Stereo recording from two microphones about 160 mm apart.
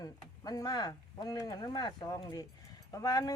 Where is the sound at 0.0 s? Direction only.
25° left (ahead or behind).